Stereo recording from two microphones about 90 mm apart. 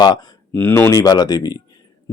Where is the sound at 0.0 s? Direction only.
50° left (ahead or behind).